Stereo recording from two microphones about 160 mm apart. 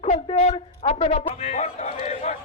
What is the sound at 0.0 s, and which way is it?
A man's voice, 40° left (ahead or behind).